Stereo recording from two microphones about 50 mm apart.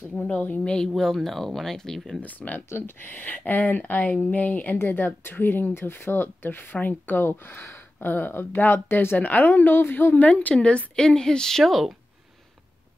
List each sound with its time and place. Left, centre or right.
0.0 s speech: left
0.7 s a woman's voice: centre
2.1 s speech: left
2.7 s speech: left
8.0 s speech: left
10.6 s a woman's voice: left; by 12.0 s centre